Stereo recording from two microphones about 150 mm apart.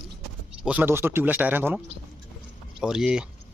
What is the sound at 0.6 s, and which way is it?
A man's voice, 10° right (ahead or behind).